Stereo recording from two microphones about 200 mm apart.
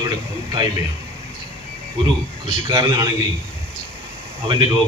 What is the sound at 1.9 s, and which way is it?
A man's voice, 25° right (ahead or behind).